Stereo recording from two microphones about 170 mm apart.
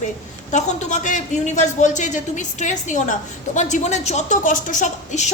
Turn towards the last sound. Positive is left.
turn(degrees=45)  # may be behind; listen again after turning